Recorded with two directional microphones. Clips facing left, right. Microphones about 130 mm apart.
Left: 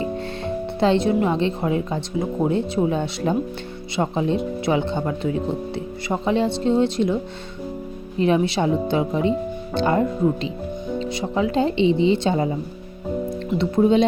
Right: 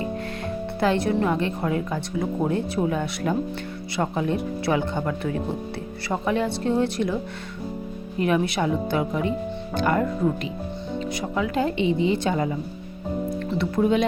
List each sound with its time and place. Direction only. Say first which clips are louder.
0.0 s speech: left 3 dB; 25° left (ahead or behind)
8.2 s speech: left 3 dB; 25° left (ahead or behind)
13.6 s speech: left 4 dB; 25° left (ahead or behind)